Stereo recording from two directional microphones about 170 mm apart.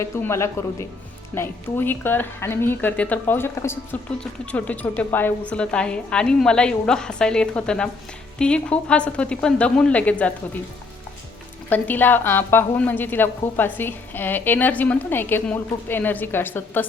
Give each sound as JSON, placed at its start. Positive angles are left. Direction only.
{"t": 0.0, "sound": "a woman's voice", "side_deg": 15}
{"t": 11.7, "sound": "a woman's voice", "side_deg": 10}